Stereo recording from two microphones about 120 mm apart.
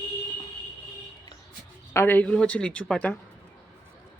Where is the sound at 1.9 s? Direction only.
15° left (ahead or behind).